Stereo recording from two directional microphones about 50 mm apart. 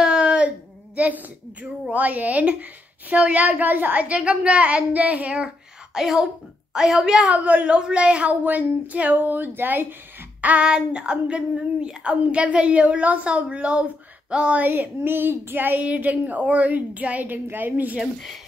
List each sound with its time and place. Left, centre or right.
0.0 s a sound: centre
0.9 s a woman's voice: right
5.9 s a woman's voice: centre
7.3 s speech: right
7.6 s speech: right
10.6 s a woman's voice: centre
14.6 s speech: right